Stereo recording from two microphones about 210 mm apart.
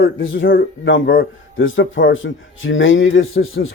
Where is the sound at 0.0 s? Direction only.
60° left (ahead or behind).